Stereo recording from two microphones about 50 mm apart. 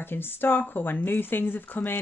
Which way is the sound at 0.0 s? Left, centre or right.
Left.